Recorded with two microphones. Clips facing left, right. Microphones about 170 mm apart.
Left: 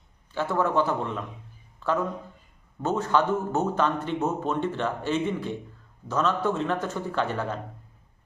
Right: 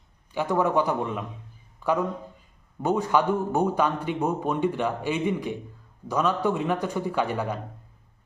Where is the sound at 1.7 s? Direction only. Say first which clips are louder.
Right 2 dB; 15° right (ahead or behind).